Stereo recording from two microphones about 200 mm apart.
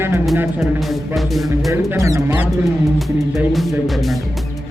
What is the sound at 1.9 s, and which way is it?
Speech, 15° right (ahead or behind).